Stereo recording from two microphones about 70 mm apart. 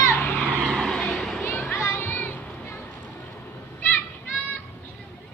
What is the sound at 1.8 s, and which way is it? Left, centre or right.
Music, left.